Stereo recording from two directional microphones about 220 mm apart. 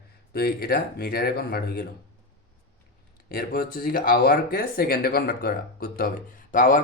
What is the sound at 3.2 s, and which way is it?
Speech, 40° left (ahead or behind).